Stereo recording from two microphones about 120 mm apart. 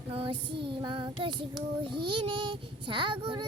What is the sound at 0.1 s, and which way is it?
Child singing, 50° right (ahead or behind).